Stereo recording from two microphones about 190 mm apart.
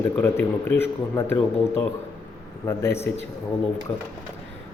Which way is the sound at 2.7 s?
15° left (ahead or behind).